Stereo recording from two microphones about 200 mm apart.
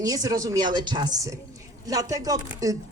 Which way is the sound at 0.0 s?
20° right (ahead or behind).